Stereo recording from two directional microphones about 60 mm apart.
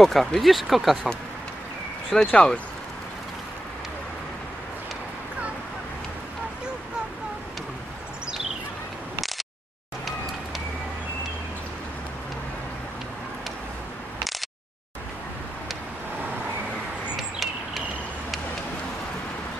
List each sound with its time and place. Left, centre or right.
0.0 s speech: centre
2.1 s speech: centre
17.2 s a sound: centre